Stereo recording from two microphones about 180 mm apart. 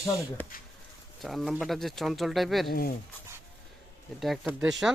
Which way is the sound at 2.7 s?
55° left (ahead or behind).